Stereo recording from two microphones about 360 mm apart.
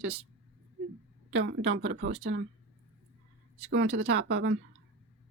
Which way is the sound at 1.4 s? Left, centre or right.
Right.